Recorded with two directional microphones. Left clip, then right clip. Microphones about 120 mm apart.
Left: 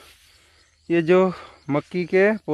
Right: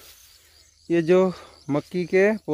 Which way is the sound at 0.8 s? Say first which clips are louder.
Left 1 dB; 15° left (ahead or behind).